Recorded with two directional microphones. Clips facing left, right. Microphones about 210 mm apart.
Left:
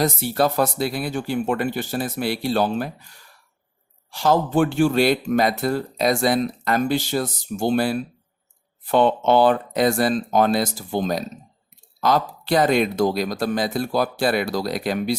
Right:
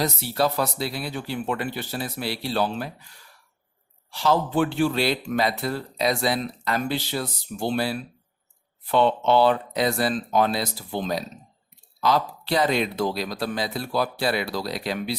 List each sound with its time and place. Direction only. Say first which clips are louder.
0.0 s a man's voice: left 4 dB; 50° left (ahead or behind)
4.1 s a man's voice: left 3 dB; 50° left (ahead or behind)